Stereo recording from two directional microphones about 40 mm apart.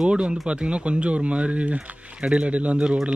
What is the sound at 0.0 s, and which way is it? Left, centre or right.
Speech, right.